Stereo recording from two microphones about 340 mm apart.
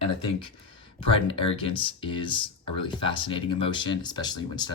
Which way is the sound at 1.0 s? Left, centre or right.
Centre.